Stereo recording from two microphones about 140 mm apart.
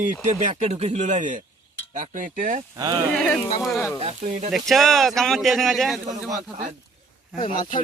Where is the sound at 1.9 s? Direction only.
65° right (ahead or behind).